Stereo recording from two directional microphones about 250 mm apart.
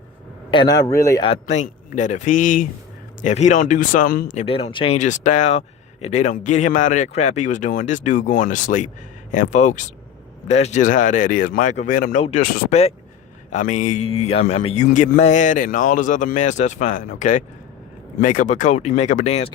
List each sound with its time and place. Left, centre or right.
0.5 s speech: centre